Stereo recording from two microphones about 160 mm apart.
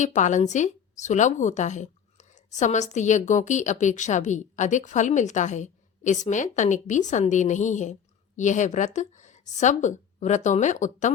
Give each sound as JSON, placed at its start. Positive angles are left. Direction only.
{"t": 0.0, "sound": "a woman's voice", "side_deg": 50}